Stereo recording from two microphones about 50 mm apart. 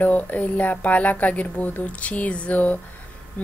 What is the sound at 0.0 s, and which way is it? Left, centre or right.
A woman's voice, left.